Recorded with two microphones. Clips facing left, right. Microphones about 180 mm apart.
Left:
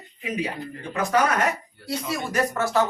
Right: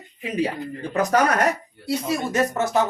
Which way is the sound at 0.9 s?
40° right (ahead or behind).